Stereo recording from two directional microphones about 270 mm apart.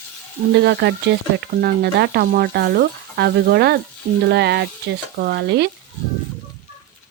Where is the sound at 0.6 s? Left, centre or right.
Right.